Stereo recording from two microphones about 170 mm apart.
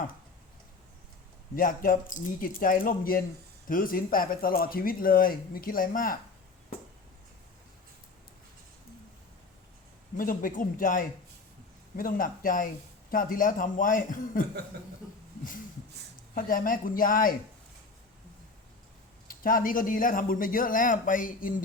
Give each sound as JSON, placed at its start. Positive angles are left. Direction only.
{"t": 1.5, "sound": "a man's voice", "side_deg": 55}
{"t": 10.2, "sound": "a man's voice", "side_deg": 55}
{"t": 16.3, "sound": "a man's voice", "side_deg": 55}
{"t": 19.3, "sound": "a man's voice", "side_deg": 55}